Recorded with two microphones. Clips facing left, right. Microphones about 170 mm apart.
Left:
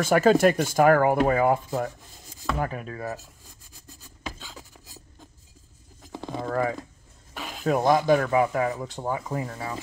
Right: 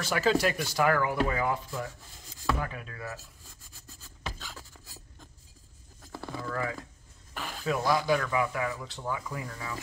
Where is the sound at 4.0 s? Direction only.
15° left (ahead or behind).